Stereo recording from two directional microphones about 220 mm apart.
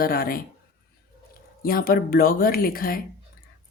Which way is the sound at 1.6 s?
40° left (ahead or behind).